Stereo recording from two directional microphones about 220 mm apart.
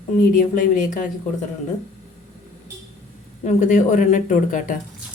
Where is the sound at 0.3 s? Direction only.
35° left (ahead or behind).